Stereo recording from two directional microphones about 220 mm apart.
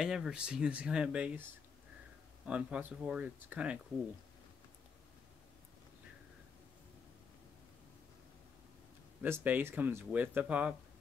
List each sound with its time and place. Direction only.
0.0 s speech: 5° right (ahead or behind)
9.2 s speech: 10° right (ahead or behind)